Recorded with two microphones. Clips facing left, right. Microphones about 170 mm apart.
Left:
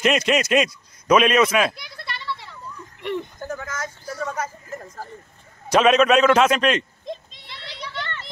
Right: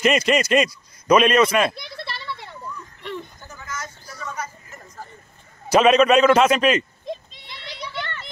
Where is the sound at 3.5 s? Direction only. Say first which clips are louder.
Left 5 dB; 55° left (ahead or behind).